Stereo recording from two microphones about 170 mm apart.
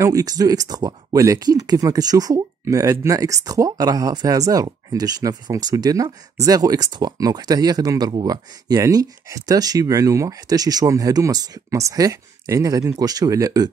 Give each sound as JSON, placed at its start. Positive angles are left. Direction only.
{"t": 0.0, "sound": "speech", "side_deg": -20}